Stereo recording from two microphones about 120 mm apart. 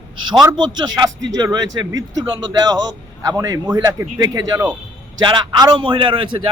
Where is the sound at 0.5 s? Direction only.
40° right (ahead or behind).